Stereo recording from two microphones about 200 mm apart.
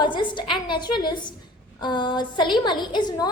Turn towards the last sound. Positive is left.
turn(degrees=20)  # may be behind; listen again after turning